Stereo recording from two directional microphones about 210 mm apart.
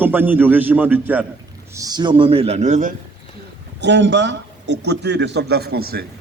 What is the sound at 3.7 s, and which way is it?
A man's voice, 55° right (ahead or behind).